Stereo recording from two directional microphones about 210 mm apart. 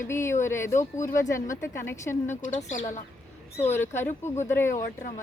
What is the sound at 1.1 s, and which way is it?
A woman's voice, 15° left (ahead or behind).